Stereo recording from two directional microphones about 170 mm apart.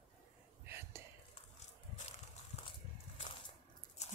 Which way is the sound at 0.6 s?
15° right (ahead or behind).